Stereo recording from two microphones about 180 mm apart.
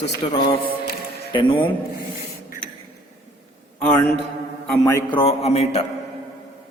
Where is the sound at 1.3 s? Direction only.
25° left (ahead or behind).